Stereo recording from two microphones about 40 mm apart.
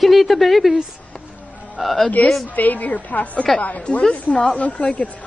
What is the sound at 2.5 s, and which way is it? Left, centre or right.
A woman's voice, left.